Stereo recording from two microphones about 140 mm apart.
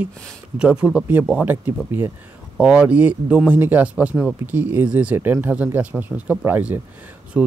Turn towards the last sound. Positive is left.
turn(degrees=-10)  # may be behind; listen again after turning